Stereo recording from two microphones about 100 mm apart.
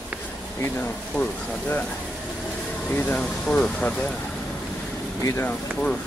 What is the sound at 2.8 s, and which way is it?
Speech, 15° left (ahead or behind).